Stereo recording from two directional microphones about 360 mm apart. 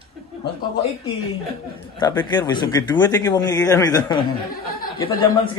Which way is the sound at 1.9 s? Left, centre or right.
Centre.